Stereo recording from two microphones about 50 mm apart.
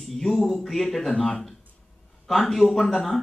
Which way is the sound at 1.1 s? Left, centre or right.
Centre.